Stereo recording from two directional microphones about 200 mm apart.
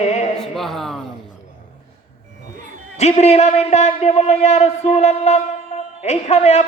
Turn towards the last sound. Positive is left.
turn(degrees=35)  # may be behind; listen again after turning